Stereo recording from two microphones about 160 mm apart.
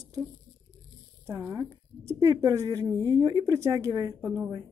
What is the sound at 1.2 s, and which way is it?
Speech, 15° right (ahead or behind).